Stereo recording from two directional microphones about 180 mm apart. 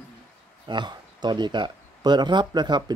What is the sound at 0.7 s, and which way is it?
Speech, 25° right (ahead or behind).